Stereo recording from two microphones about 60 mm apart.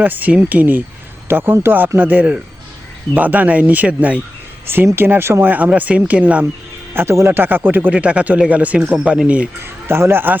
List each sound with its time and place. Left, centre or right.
0.0 s speech: right
4.9 s speech: right
5.5 s speech: right
6.9 s speech: right
7.3 s speech: right
7.9 s speech: right
9.8 s speech: right